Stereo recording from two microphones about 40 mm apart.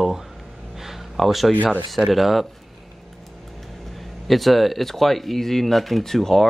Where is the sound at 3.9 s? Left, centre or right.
Centre.